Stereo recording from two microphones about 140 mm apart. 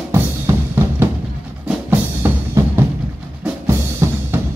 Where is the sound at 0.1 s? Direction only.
20° right (ahead or behind).